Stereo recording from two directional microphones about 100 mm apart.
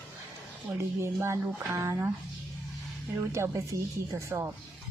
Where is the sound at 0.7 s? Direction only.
25° right (ahead or behind).